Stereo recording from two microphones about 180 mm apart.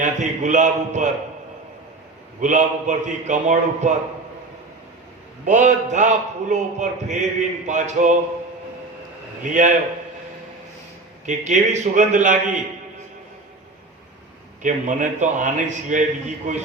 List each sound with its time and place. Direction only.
0.0 s a man's voice: 40° right (ahead or behind)
2.4 s a man's voice: 45° right (ahead or behind)
5.5 s a man's voice: 45° right (ahead or behind)
9.4 s a man's voice: 45° right (ahead or behind)
11.3 s a man's voice: 40° right (ahead or behind)
14.6 s a man's voice: 45° right (ahead or behind)